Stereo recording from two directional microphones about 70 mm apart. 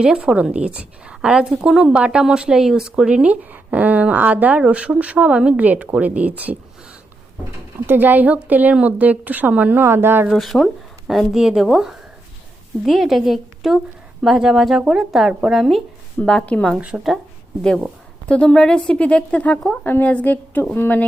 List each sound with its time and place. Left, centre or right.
0.0 s a woman's voice: centre
7.9 s speech: right
9.8 s speech: right
10.3 s a woman's voice: centre
16.2 s speech: centre
16.7 s a woman's voice: centre
18.3 s speech: centre
19.8 s a woman's voice: left